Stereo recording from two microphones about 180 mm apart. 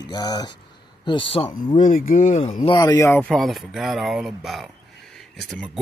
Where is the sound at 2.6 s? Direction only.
25° left (ahead or behind).